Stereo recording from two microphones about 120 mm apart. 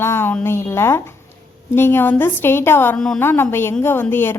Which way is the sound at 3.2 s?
20° left (ahead or behind).